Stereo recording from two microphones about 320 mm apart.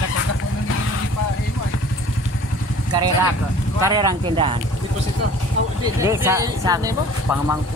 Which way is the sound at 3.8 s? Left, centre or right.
Centre.